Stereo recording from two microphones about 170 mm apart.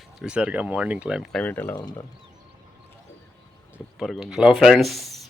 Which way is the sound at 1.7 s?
25° left (ahead or behind).